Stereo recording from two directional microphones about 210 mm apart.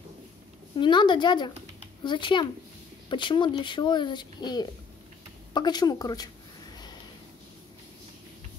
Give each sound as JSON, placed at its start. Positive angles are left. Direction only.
{"t": 0.7, "sound": "speech", "side_deg": 20}